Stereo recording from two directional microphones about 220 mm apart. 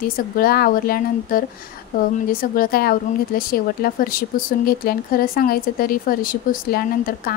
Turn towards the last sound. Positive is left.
turn(degrees=40)  # may be behind; listen again after turning